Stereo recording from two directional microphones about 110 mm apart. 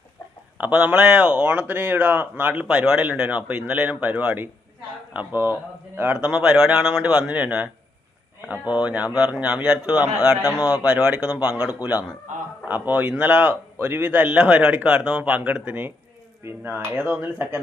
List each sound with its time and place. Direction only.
0.6 s speech: 15° right (ahead or behind)
8.7 s speech: 10° right (ahead or behind)